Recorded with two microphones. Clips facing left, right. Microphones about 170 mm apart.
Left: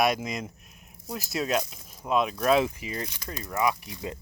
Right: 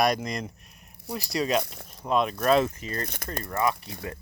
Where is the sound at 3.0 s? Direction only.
55° right (ahead or behind).